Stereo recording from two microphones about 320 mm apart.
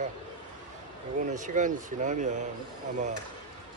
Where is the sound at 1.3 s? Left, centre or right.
Right.